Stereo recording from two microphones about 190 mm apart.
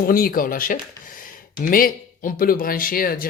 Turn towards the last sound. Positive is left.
turn(degrees=50)  # may be behind; listen again after turning